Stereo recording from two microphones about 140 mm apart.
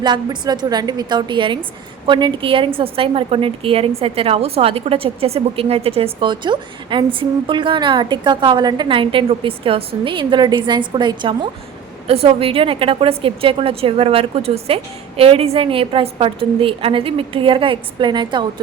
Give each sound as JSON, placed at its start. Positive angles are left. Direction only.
{"t": 0.0, "sound": "a woman's voice", "side_deg": -30}
{"t": 12.0, "sound": "a woman's voice", "side_deg": -45}